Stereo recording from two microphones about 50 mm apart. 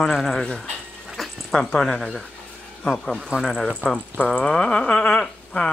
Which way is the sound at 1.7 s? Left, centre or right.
Centre.